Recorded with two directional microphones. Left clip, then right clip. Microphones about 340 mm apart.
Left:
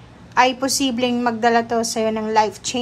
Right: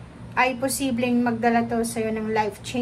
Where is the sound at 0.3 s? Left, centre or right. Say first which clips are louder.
Left 6 dB; centre.